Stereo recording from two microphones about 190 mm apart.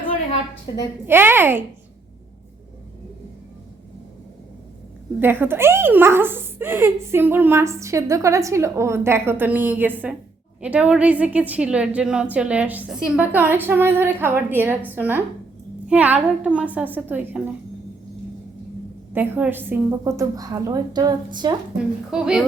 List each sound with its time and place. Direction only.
1.0 s speech: 10° right (ahead or behind)
5.2 s speech: 10° right (ahead or behind)
19.1 s speech: 10° right (ahead or behind)
22.1 s a woman's voice: 5° right (ahead or behind)